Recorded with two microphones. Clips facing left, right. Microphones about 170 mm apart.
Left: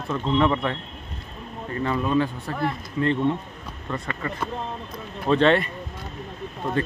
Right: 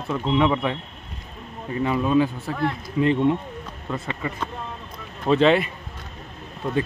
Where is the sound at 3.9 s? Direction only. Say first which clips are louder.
Right 1 dB; 5° right (ahead or behind).